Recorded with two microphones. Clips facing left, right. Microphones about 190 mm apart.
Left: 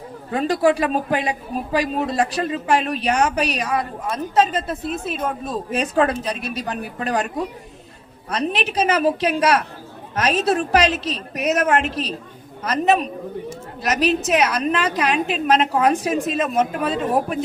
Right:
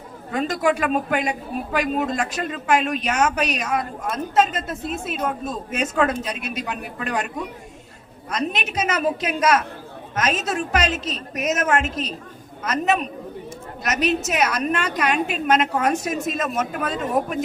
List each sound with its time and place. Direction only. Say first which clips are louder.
0.3 s a woman's voice: left 3 dB; 35° left (ahead or behind)
8.3 s a woman's voice: left 3 dB; 35° left (ahead or behind)